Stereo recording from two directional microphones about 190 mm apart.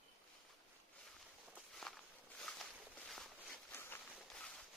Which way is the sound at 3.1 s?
Centre (ahead or behind).